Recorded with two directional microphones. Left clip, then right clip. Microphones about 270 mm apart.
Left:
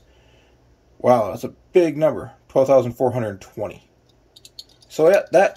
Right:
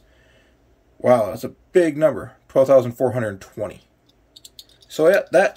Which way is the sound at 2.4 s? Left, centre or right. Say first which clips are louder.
Right 1 dB; right.